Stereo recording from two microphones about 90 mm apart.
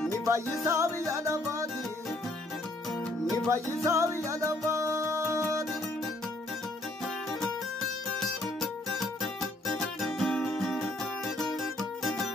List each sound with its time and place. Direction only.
0.2 s music: 35° right (ahead or behind)
3.4 s music: 35° right (ahead or behind)
8.2 s music: centre (ahead or behind)